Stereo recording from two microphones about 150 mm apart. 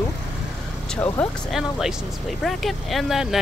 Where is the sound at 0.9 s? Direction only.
5° left (ahead or behind).